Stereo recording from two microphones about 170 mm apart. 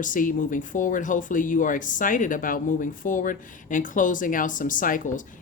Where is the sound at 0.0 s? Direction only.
50° left (ahead or behind).